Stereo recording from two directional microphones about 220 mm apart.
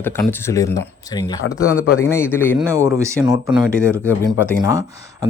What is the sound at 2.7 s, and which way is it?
Speech, 15° right (ahead or behind).